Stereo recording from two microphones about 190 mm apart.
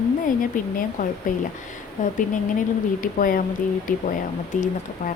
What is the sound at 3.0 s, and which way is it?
Speech, 45° left (ahead or behind).